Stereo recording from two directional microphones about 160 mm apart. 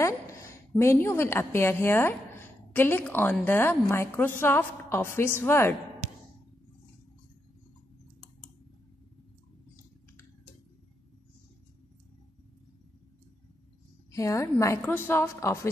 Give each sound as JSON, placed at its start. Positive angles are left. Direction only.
{"t": 0.0, "sound": "a woman's voice", "side_deg": 20}
{"t": 6.0, "sound": "a sound", "side_deg": -40}
{"t": 14.1, "sound": "a woman's voice", "side_deg": 20}